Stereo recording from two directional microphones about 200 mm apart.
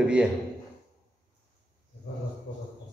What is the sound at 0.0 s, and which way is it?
Speech, 5° right (ahead or behind).